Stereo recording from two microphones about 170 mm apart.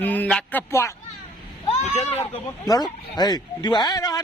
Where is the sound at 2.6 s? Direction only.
20° left (ahead or behind).